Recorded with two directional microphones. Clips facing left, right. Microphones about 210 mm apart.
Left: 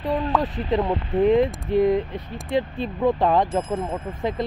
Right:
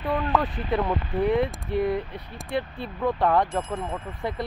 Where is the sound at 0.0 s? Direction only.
35° left (ahead or behind).